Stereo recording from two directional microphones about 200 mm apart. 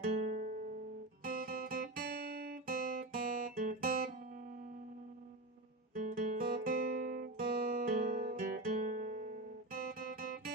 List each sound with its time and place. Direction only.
0.0 s music: 35° right (ahead or behind)
1.2 s guitar: 45° right (ahead or behind)
5.9 s guitar: 40° right (ahead or behind)
10.2 s music: 45° right (ahead or behind)